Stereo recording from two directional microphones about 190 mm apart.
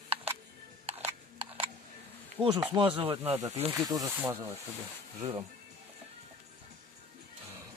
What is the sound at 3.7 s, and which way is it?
Speech, 20° right (ahead or behind).